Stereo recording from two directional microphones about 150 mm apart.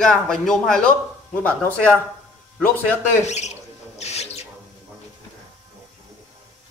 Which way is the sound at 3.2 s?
50° left (ahead or behind).